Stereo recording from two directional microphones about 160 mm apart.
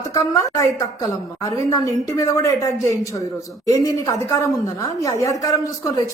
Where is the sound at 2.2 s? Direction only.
20° left (ahead or behind).